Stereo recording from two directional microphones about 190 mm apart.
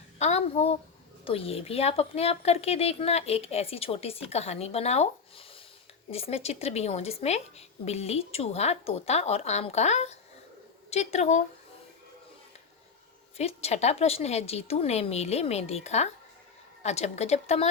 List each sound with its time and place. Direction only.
0.2 s a woman's voice: 35° left (ahead or behind)
13.3 s a woman's voice: 35° left (ahead or behind)